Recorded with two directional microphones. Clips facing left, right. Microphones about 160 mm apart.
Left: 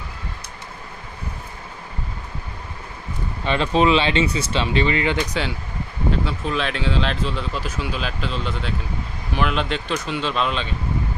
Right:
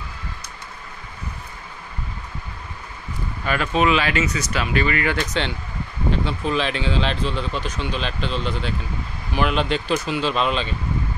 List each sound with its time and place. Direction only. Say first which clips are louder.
3.4 s speech: left 2 dB; 25° left (ahead or behind)
6.2 s speech: right 1 dB; centre (ahead or behind)